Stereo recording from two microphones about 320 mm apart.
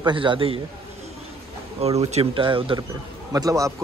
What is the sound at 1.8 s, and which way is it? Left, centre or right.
Speech, centre.